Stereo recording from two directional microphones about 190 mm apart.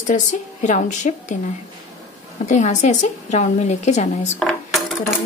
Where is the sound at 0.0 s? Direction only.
40° left (ahead or behind).